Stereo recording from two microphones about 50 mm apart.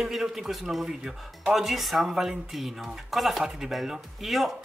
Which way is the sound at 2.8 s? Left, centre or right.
Centre.